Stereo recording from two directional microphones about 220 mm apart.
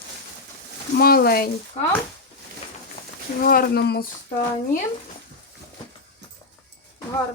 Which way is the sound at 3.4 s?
45° left (ahead or behind).